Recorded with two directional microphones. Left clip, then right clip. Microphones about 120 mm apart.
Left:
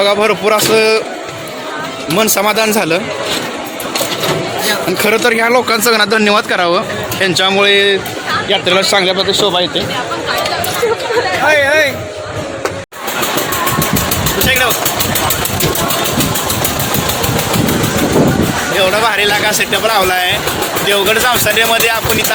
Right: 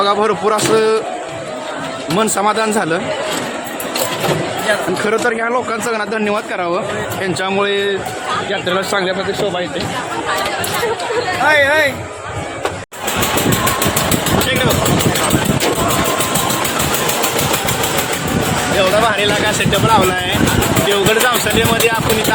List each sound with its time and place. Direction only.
0.0 s speech: centre (ahead or behind)
2.1 s speech: centre (ahead or behind)
5.0 s speech: 20° left (ahead or behind)
6.7 s speech: 15° left (ahead or behind)
11.4 s speech: 15° left (ahead or behind)
18.8 s speech: centre (ahead or behind)